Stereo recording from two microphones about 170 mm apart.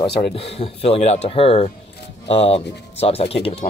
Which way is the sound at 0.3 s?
35° left (ahead or behind).